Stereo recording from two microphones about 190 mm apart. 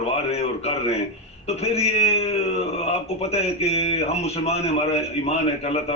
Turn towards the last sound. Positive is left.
turn(degrees=35)  # may be behind; listen again after turning